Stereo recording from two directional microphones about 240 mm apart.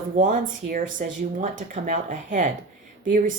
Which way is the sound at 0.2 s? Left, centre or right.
Right.